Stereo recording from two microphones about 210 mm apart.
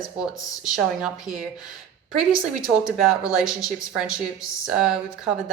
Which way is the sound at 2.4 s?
15° left (ahead or behind).